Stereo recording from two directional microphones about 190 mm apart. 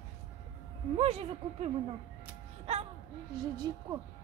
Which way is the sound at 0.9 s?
35° right (ahead or behind).